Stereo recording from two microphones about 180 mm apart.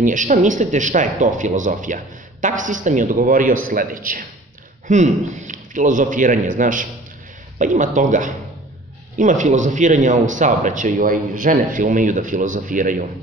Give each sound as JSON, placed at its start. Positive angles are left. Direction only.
{"t": 0.0, "sound": "speech", "side_deg": -45}